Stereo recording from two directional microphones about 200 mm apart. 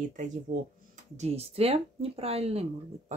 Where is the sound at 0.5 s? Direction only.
45° right (ahead or behind).